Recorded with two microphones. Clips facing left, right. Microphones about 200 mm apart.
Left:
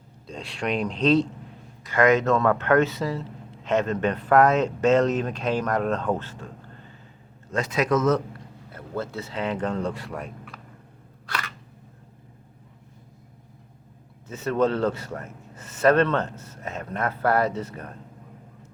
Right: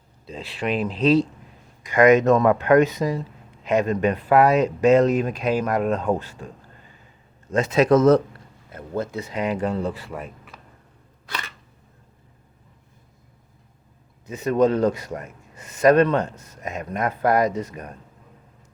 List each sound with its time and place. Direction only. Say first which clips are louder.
0.3 s speech: right 2 dB; 5° right (ahead or behind)
7.5 s speech: right 6 dB; 25° right (ahead or behind)
8.7 s speech: right 4 dB; 15° right (ahead or behind)
14.3 s speech: right 4 dB; 15° right (ahead or behind)